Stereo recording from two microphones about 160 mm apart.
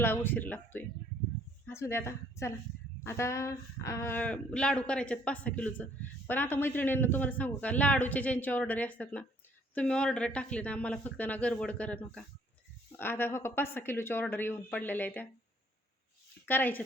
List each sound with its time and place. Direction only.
0.0 s a man's voice: 15° left (ahead or behind)
16.5 s a man's voice: 10° left (ahead or behind)